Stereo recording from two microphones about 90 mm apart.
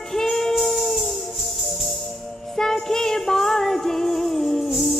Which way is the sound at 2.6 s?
5° left (ahead or behind).